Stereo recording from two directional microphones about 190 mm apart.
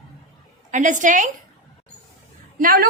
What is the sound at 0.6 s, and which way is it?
Speech, 40° right (ahead or behind).